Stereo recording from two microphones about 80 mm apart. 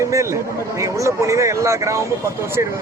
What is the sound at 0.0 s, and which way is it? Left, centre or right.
Speech, right.